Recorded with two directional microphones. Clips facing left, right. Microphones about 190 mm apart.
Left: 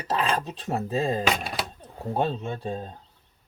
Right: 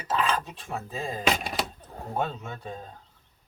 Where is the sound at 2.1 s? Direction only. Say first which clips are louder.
Left 5 dB; 30° left (ahead or behind).